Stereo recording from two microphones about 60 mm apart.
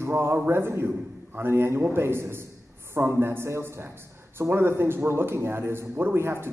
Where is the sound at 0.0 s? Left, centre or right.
Right.